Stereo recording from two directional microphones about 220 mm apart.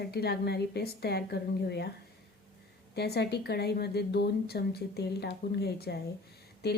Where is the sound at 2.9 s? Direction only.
45° left (ahead or behind).